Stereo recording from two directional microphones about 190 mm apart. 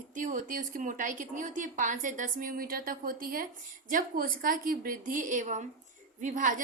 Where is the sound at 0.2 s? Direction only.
45° right (ahead or behind).